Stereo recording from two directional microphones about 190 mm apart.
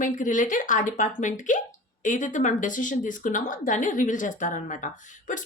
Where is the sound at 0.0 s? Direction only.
40° left (ahead or behind).